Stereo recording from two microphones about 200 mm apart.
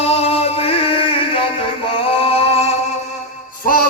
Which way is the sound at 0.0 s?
30° left (ahead or behind).